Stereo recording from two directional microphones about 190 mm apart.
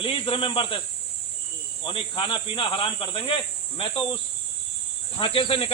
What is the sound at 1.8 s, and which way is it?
Speech, 25° left (ahead or behind).